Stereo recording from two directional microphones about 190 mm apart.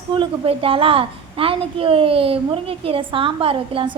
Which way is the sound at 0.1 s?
25° right (ahead or behind).